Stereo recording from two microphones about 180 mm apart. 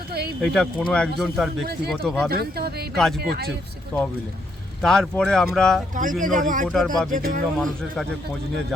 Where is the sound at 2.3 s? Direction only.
60° right (ahead or behind).